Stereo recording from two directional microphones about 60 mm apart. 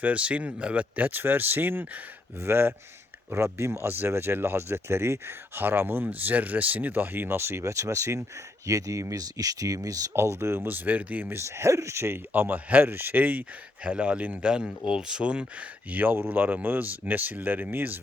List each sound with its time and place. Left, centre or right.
0.0 s speech: right
5.6 s speech: right
10.1 s speech: right
11.3 s speech: right
12.3 s speech: right
13.8 s speech: centre
15.9 s speech: right